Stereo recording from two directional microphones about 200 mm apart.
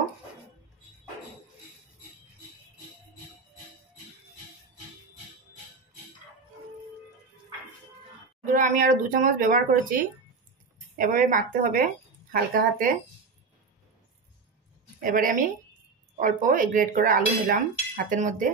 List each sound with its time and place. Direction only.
8.5 s speech: 40° right (ahead or behind)
15.0 s a woman's voice: 45° right (ahead or behind)